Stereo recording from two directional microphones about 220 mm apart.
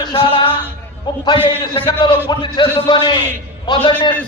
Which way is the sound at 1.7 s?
25° left (ahead or behind).